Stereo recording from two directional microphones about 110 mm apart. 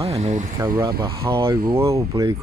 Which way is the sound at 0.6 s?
30° right (ahead or behind).